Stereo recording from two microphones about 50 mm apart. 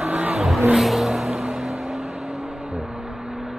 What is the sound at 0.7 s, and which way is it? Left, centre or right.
Music, centre.